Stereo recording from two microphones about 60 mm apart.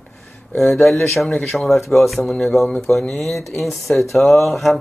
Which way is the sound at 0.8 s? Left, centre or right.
Centre.